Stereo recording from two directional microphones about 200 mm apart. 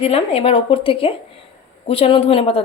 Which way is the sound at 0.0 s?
30° left (ahead or behind).